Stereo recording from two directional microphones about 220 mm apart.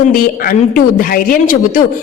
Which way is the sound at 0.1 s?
40° left (ahead or behind).